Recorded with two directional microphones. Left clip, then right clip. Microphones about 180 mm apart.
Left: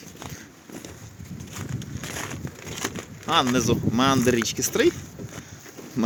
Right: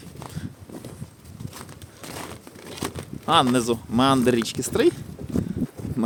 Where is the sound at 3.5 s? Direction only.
20° right (ahead or behind).